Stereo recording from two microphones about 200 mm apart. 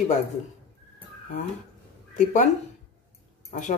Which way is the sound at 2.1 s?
35° left (ahead or behind).